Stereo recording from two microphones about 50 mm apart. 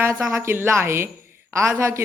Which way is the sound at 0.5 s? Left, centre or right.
Right.